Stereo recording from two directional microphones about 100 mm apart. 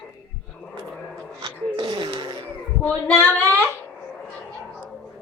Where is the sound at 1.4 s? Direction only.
50° right (ahead or behind).